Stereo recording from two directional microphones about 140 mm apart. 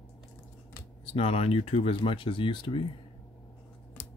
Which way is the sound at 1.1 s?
45° left (ahead or behind).